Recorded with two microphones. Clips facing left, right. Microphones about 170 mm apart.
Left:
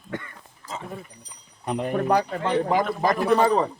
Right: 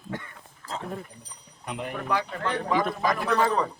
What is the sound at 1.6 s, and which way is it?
A man's voice, 40° left (ahead or behind).